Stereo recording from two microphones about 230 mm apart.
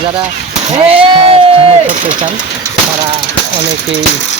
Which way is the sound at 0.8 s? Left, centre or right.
Right.